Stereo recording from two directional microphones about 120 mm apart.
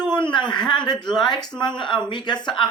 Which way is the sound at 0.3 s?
40° left (ahead or behind).